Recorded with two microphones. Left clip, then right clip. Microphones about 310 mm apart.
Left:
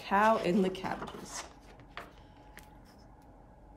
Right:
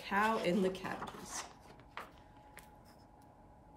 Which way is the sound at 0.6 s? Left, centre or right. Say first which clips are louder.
Left 4 dB; centre.